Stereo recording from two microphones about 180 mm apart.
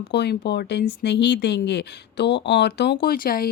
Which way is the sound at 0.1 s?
70° left (ahead or behind).